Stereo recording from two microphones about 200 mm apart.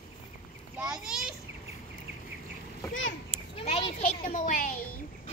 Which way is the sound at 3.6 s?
30° left (ahead or behind).